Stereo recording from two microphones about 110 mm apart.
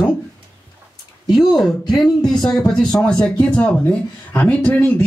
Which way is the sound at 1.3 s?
Centre (ahead or behind).